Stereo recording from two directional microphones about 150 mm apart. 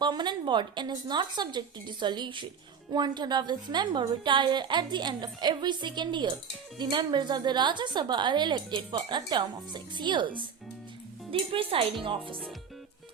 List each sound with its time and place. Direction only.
0.0 s a woman's voice: 30° right (ahead or behind)
11.3 s a woman's voice: 35° right (ahead or behind)